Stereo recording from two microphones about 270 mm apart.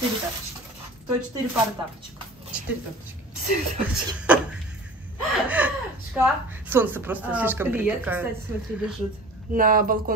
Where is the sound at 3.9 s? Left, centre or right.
Centre.